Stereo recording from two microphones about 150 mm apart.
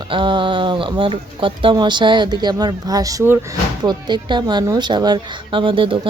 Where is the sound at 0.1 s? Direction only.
35° right (ahead or behind).